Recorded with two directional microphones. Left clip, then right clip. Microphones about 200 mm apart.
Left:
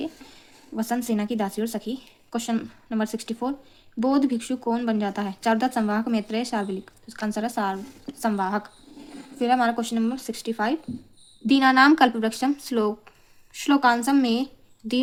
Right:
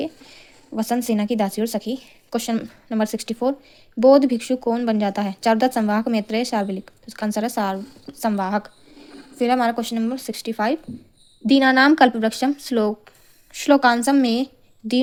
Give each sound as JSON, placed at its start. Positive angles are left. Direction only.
{"t": 0.0, "sound": "speech", "side_deg": -35}